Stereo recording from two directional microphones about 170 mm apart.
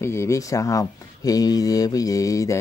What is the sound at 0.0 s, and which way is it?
Speech, 15° left (ahead or behind).